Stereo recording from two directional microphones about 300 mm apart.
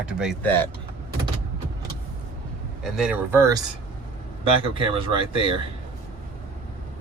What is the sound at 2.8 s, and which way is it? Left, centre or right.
Speech, centre.